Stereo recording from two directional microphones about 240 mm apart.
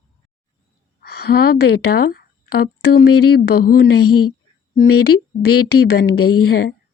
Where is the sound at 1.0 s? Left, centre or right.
Left.